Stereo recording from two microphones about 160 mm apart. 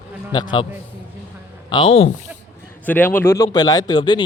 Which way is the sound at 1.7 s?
35° left (ahead or behind).